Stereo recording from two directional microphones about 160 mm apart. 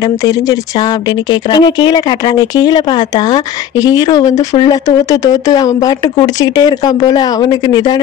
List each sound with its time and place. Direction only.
1.5 s speech: 25° left (ahead or behind)
3.8 s speech: 25° left (ahead or behind)